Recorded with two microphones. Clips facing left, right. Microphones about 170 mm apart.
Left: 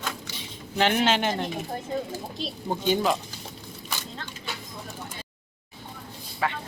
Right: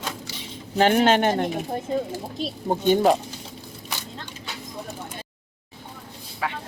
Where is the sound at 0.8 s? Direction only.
45° right (ahead or behind).